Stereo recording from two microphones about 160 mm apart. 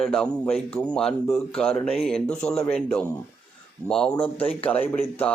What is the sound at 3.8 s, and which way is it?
Speech, 5° left (ahead or behind).